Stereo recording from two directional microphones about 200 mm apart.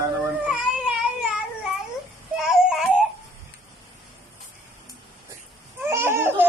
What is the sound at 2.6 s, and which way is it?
Baby cry, 5° right (ahead or behind).